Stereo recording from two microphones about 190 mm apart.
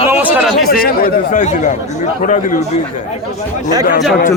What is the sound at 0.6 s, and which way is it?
Speech, 50° left (ahead or behind).